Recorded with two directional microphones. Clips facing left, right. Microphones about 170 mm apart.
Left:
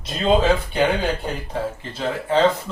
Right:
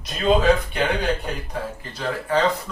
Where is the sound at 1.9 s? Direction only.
25° left (ahead or behind).